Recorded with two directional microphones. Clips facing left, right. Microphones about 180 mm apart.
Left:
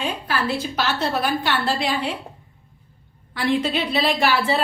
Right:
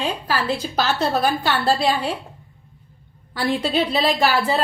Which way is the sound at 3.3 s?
40° right (ahead or behind).